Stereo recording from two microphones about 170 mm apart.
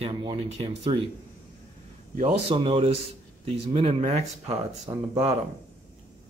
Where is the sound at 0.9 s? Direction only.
40° right (ahead or behind).